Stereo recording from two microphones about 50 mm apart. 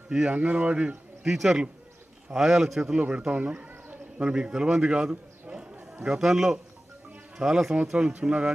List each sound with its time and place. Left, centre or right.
0.1 s a man's voice: centre
4.2 s speech: centre
5.1 s a sound: centre
7.3 s a man's voice: centre